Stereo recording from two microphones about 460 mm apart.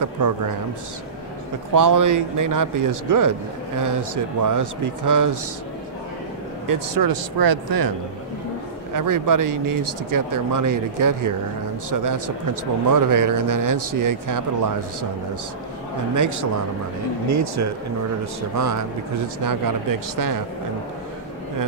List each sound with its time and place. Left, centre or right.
1.7 s speech: right
6.7 s speech: right
8.9 s speech: right
17.3 s speech: right